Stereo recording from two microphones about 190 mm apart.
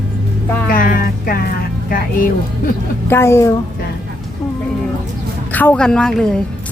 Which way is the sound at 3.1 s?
15° left (ahead or behind).